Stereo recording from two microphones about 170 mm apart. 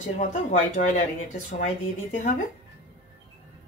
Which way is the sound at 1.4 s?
45° left (ahead or behind).